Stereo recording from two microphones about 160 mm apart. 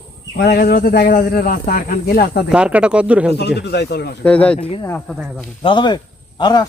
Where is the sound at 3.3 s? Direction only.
90° left.